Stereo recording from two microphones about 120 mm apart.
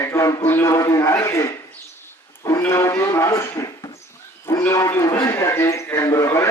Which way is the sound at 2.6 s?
25° left (ahead or behind).